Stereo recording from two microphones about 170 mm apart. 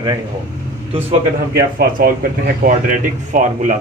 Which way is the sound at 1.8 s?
60° right (ahead or behind).